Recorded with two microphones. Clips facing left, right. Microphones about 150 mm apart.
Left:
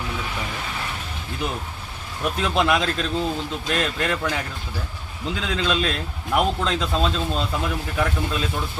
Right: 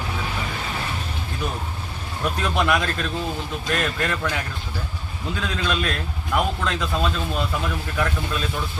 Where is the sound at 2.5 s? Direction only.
25° left (ahead or behind).